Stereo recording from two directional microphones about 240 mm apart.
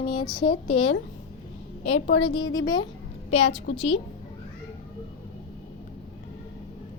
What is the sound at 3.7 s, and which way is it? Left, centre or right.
Speech, left.